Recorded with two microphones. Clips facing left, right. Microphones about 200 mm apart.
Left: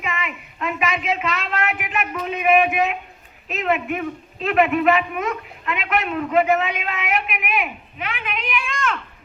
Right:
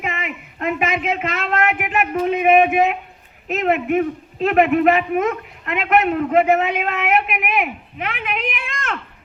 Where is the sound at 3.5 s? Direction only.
55° right (ahead or behind).